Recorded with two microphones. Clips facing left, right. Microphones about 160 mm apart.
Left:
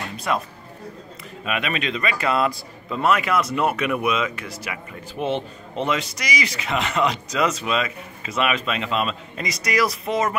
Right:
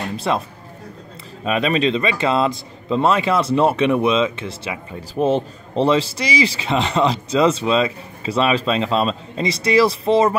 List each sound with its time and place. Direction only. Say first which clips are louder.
0.3 s a man's voice: right 2 dB; 25° right (ahead or behind)
5.2 s a man's voice: right 7 dB; 35° right (ahead or behind)